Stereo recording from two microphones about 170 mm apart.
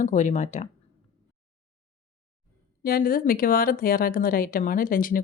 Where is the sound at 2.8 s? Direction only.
60° left (ahead or behind).